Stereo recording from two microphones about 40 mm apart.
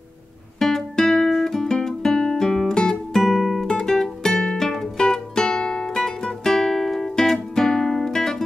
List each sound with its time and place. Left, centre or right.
0.6 s music: centre
1.3 s guitar: centre
1.8 s music: centre
3.6 s music: centre